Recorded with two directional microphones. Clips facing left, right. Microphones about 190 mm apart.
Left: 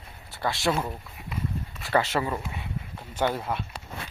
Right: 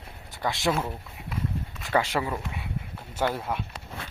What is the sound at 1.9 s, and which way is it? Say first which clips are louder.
Speech: left 1 dB; 10° right (ahead or behind).